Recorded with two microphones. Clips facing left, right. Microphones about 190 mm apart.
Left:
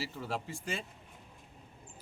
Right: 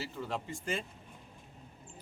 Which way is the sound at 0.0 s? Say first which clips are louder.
Even; 5° left (ahead or behind).